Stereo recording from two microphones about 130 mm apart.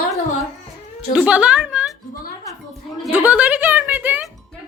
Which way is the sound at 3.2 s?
10° right (ahead or behind).